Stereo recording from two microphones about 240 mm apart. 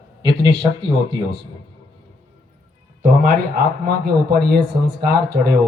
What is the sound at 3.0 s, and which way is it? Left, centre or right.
Speech, right.